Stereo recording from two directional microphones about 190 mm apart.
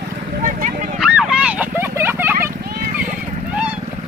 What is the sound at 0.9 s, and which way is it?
Vehicle, 5° right (ahead or behind).